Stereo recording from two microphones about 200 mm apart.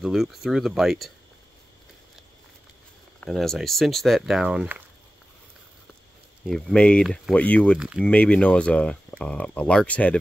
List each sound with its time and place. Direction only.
0.0 s speech: centre (ahead or behind)
3.2 s speech: centre (ahead or behind)
6.4 s speech: 5° left (ahead or behind)